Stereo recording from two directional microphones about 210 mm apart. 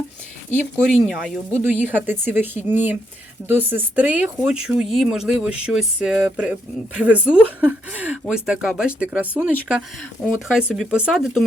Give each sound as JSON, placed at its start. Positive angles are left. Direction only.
{"t": 1.0, "sound": "speech", "side_deg": 0}
{"t": 1.5, "sound": "speech", "side_deg": -10}